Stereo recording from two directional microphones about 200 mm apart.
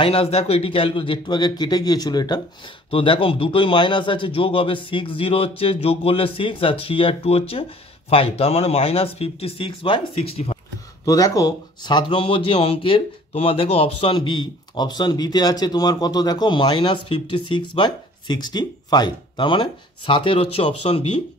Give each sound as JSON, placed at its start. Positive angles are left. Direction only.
{"t": 0.0, "sound": "speech", "side_deg": 30}
{"t": 11.1, "sound": "speech", "side_deg": 15}